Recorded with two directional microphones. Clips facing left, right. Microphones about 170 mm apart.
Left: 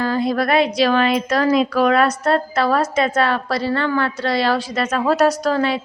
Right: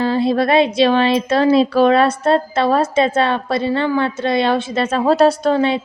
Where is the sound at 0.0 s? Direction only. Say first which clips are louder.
Right 3 dB; 25° right (ahead or behind).